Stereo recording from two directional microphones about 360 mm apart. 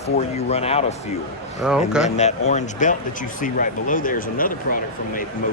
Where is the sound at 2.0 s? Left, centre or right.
Centre.